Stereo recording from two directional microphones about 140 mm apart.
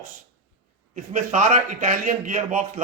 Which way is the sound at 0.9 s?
60° right (ahead or behind).